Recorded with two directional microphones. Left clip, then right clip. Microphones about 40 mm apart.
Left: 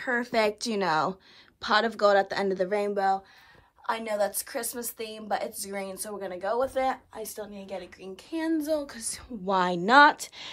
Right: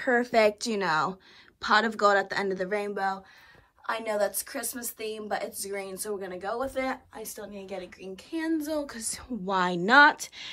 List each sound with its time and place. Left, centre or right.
0.0 s a woman's voice: centre
0.3 s speech: left
1.6 s a woman's voice: left
2.2 s speech: left
4.0 s speech: left
4.6 s a woman's voice: left
6.9 s a woman's voice: left
8.8 s a woman's voice: centre